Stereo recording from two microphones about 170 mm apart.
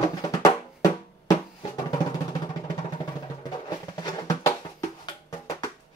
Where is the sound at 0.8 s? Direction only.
20° left (ahead or behind).